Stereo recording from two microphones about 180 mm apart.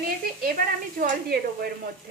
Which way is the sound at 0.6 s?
50° right (ahead or behind).